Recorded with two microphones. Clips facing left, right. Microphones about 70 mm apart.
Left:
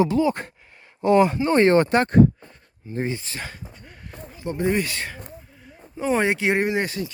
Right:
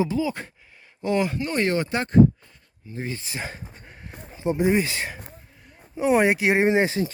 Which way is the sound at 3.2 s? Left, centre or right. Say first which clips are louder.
Right 1 dB; centre.